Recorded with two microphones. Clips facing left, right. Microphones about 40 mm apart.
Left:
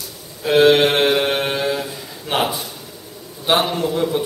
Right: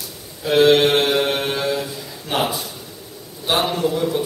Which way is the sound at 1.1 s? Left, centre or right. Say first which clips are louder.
Left 1 dB; centre.